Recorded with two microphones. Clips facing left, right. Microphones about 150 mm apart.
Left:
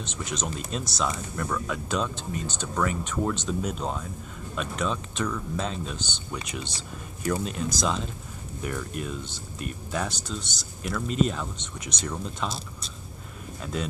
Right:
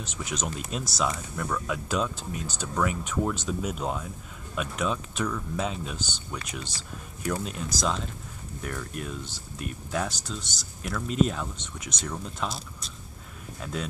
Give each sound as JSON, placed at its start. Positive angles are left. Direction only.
{"t": 0.0, "sound": "speech", "side_deg": -5}
{"t": 13.6, "sound": "speech", "side_deg": 0}